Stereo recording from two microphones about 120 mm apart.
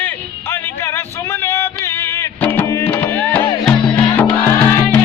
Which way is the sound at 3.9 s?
15° left (ahead or behind).